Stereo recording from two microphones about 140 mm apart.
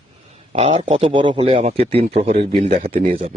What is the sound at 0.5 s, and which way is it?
A man's voice, 45° right (ahead or behind).